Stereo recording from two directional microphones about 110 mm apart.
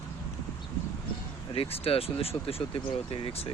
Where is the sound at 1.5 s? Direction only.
60° left (ahead or behind).